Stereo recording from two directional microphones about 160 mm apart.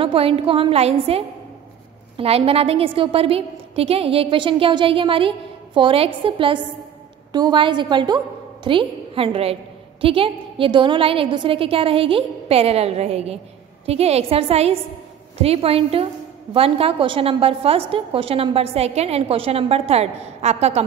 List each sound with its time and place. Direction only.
0.0 s a woman's voice: 35° right (ahead or behind)